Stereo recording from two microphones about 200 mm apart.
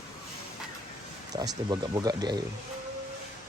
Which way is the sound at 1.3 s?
20° right (ahead or behind).